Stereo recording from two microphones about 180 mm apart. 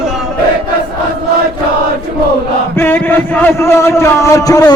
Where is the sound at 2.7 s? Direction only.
10° left (ahead or behind).